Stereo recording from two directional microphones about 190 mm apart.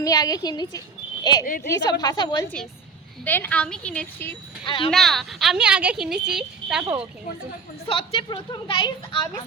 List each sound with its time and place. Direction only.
0.0 s a woman's voice: 20° left (ahead or behind)
3.2 s a woman's voice: 10° left (ahead or behind)
4.6 s a woman's voice: 25° left (ahead or behind)
4.9 s speech: centre (ahead or behind)
7.9 s a woman's voice: 30° left (ahead or behind)